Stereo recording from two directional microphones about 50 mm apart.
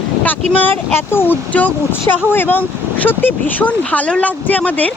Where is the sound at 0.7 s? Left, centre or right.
Left.